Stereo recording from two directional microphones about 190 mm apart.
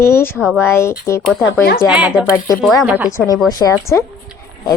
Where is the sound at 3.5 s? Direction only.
20° left (ahead or behind).